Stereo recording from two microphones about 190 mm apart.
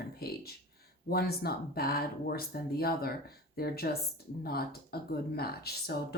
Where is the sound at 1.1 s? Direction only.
55° left (ahead or behind).